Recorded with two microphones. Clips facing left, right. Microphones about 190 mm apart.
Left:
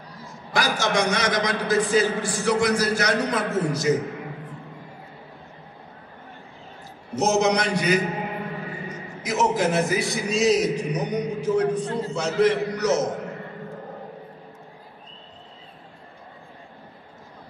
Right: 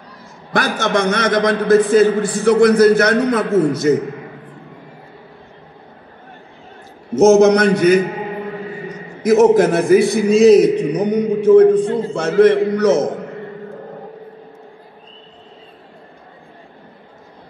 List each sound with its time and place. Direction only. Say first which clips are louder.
0.5 s a man's voice: right 6 dB; 55° right (ahead or behind)
7.2 s a man's voice: right 11 dB; 50° right (ahead or behind)
9.2 s a man's voice: right 12 dB; 55° right (ahead or behind)